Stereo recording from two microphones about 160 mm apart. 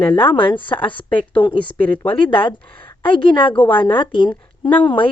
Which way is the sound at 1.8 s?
10° left (ahead or behind).